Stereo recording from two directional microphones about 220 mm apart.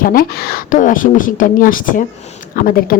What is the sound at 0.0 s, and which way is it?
Speech, 40° left (ahead or behind).